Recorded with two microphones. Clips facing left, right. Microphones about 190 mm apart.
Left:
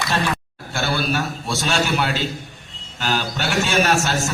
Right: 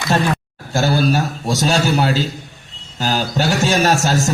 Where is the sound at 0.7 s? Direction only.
40° right (ahead or behind).